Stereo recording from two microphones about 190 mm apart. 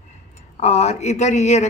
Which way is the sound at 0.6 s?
35° left (ahead or behind).